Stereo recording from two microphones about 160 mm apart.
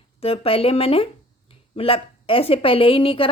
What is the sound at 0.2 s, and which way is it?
Speech, 35° left (ahead or behind).